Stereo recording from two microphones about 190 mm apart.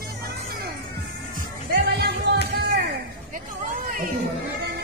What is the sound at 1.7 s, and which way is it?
Music, 60° right (ahead or behind).